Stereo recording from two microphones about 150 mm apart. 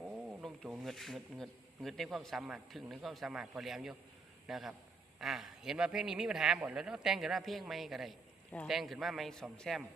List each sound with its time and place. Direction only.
0.0 s a man's voice: centre (ahead or behind)